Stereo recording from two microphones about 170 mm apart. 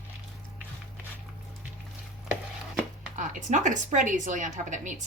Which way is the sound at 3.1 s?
45° right (ahead or behind).